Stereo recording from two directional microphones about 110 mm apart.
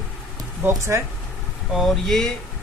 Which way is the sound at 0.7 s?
25° right (ahead or behind).